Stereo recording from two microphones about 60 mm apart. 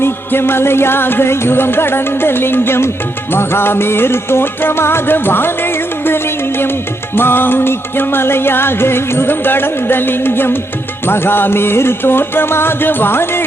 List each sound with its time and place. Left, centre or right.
0.0 s music: left